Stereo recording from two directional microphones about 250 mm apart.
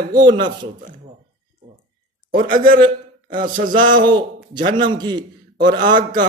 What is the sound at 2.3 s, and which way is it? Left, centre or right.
A man's voice, right.